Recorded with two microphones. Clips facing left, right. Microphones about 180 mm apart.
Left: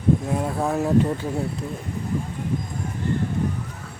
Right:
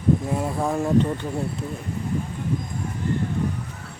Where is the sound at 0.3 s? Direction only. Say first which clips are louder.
Left 1 dB; centre (ahead or behind).